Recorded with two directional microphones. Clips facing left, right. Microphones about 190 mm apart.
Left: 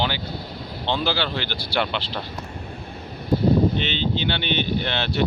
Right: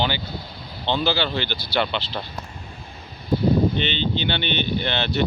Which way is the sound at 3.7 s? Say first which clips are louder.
Even; 5° left (ahead or behind).